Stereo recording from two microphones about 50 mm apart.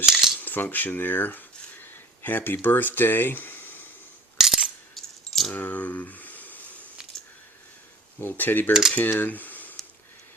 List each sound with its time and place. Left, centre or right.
0.0 s cutlery: centre
0.3 s speech: left
4.4 s coin: centre
4.9 s keys jangling: centre
5.5 s clicking: left
8.2 s speech: left